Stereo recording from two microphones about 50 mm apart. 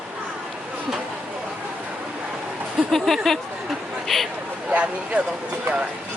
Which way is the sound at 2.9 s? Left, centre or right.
Centre.